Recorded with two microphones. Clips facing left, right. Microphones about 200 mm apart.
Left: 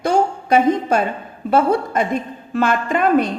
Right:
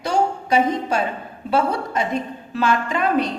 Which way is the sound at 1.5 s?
50° left (ahead or behind).